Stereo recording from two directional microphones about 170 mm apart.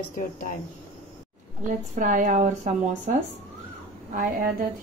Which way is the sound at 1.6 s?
50° right (ahead or behind).